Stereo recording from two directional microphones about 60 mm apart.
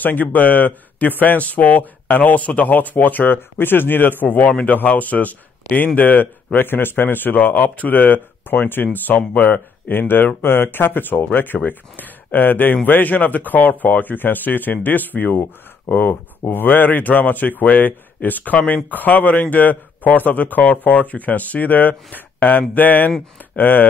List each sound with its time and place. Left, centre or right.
0.0 s speech: left